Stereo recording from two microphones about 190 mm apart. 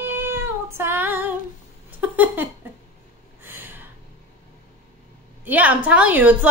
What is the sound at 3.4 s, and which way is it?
Snort, 10° right (ahead or behind).